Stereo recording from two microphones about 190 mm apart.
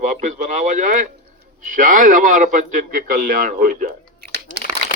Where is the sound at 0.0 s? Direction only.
40° right (ahead or behind).